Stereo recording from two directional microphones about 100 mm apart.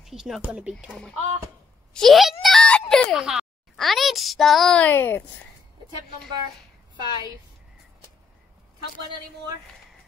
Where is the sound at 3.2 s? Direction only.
10° right (ahead or behind).